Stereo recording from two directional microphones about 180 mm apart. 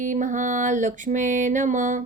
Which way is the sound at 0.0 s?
45° right (ahead or behind).